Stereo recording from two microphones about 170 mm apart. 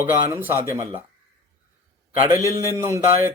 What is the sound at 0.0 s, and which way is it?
Speech, 15° right (ahead or behind).